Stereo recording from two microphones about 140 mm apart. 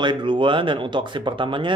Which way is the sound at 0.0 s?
35° right (ahead or behind).